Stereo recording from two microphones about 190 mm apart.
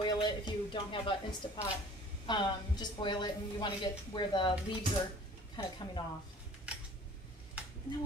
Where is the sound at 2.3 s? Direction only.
25° left (ahead or behind).